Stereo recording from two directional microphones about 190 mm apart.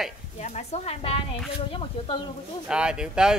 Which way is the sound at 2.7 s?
5° right (ahead or behind).